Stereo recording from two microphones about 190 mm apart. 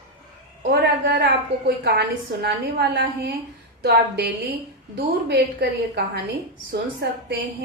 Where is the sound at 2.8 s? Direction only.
60° right (ahead or behind).